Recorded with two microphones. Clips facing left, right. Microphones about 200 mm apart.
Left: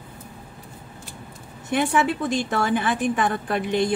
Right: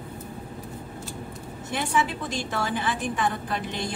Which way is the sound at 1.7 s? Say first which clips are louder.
Left 5 dB; 60° left (ahead or behind).